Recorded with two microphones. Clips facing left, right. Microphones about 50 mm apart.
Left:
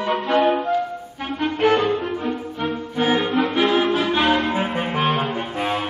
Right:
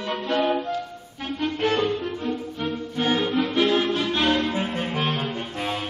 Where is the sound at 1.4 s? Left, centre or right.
Centre.